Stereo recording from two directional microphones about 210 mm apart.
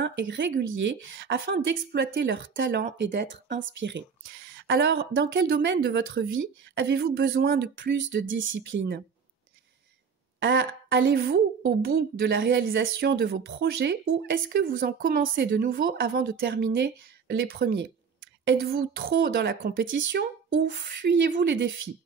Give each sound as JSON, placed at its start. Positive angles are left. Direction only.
{"t": 0.0, "sound": "a woman's voice", "side_deg": -60}
{"t": 10.4, "sound": "a woman's voice", "side_deg": -55}